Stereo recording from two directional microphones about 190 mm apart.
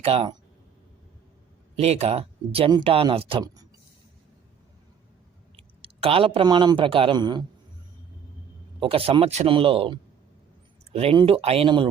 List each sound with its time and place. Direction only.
0.0 s speech: 30° right (ahead or behind)
1.7 s speech: 35° right (ahead or behind)
5.5 s speech: 30° right (ahead or behind)
8.8 s speech: 30° right (ahead or behind)